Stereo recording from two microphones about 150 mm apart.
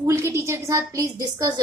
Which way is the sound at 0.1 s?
20° right (ahead or behind).